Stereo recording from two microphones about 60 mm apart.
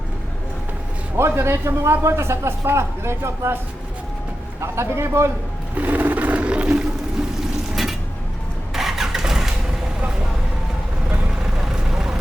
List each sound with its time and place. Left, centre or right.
1.1 s a man's voice: right
4.6 s a man's voice: right
5.7 s toilet flush: right
8.7 s vehicle: centre
11.7 s vehicle: centre